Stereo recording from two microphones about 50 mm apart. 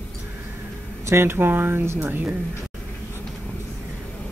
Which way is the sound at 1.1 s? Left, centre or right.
Right.